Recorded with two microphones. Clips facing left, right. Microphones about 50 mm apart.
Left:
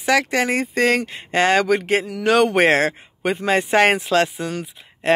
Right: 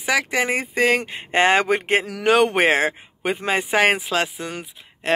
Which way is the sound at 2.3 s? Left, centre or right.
Centre.